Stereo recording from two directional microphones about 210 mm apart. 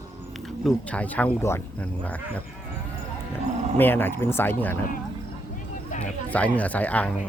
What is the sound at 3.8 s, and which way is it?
Speech, 10° left (ahead or behind).